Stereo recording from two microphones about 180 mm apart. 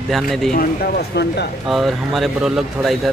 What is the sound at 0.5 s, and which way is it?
Speech, 55° left (ahead or behind).